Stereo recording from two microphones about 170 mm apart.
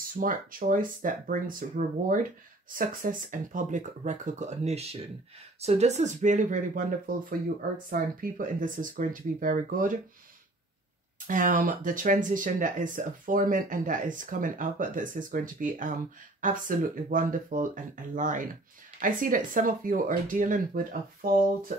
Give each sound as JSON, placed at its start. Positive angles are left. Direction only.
{"t": 0.2, "sound": "speech", "side_deg": -55}
{"t": 11.2, "sound": "speech", "side_deg": -50}